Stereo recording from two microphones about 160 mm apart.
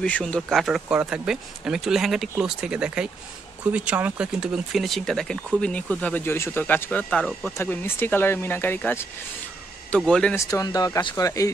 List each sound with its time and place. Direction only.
0.0 s speech: 5° left (ahead or behind)
10.3 s speech: 20° left (ahead or behind)